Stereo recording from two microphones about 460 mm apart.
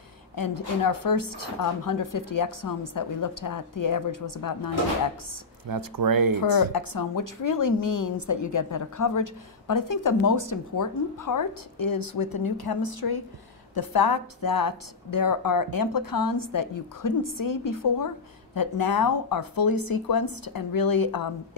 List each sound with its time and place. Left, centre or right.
0.4 s a woman's voice: left
5.7 s speech: right
6.5 s a woman's voice: left